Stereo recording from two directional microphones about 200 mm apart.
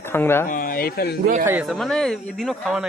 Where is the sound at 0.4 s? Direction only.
40° left (ahead or behind).